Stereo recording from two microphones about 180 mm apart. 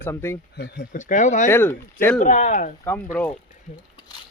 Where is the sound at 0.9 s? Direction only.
45° left (ahead or behind).